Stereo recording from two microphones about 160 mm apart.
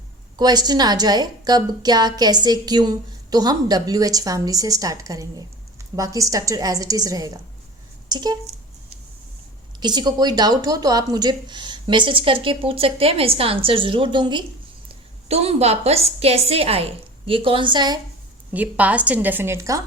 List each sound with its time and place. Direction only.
0.3 s a woman's voice: 25° right (ahead or behind)
9.8 s a woman's voice: 25° right (ahead or behind)
14.8 s a woman's voice: 40° right (ahead or behind)
18.5 s a woman's voice: 10° right (ahead or behind)